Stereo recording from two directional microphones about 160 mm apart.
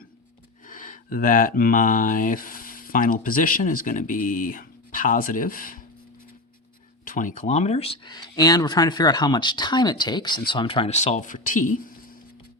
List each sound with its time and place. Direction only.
0.7 s speech: 55° left (ahead or behind)
7.0 s speech: 55° left (ahead or behind)